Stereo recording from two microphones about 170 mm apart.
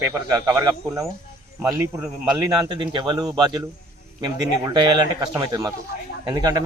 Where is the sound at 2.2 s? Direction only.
25° right (ahead or behind).